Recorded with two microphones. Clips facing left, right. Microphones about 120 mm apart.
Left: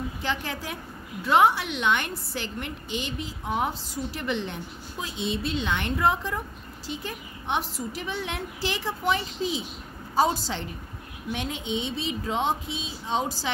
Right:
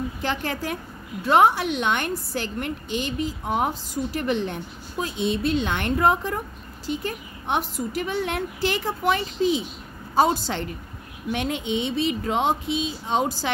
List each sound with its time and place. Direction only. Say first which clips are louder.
0.2 s a woman's voice: right 4 dB; 50° right (ahead or behind)